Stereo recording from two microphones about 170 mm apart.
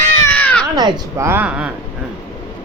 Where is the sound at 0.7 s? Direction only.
25° right (ahead or behind).